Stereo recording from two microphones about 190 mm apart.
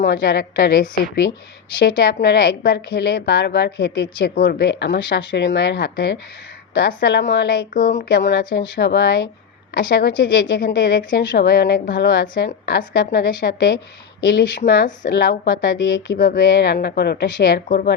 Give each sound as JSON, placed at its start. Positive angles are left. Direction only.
{"t": 0.0, "sound": "a woman's voice", "side_deg": 60}